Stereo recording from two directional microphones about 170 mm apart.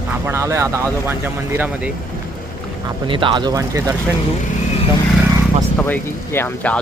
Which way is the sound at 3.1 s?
30° right (ahead or behind).